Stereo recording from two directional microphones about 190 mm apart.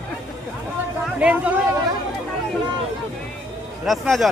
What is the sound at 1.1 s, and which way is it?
Speech, 5° right (ahead or behind).